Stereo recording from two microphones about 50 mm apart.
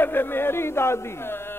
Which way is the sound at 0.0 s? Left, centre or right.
Left.